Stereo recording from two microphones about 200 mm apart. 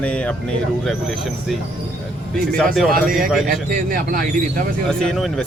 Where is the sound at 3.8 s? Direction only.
45° right (ahead or behind).